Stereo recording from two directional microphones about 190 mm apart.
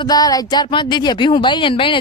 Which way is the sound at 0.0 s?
20° left (ahead or behind).